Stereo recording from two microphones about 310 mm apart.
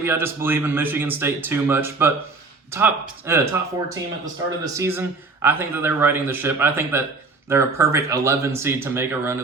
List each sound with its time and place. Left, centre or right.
0.0 s speech: centre